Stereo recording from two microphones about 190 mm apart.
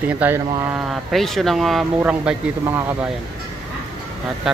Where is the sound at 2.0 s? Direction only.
10° right (ahead or behind).